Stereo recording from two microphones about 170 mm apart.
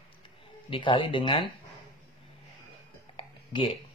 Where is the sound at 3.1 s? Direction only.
35° left (ahead or behind).